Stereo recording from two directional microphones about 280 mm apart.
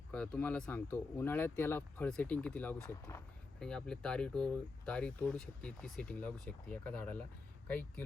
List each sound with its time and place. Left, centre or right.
0.1 s speech: centre